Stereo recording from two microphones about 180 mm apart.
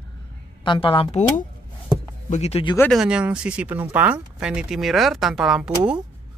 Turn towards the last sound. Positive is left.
turn(degrees=-5)  # may be behind; listen again after turning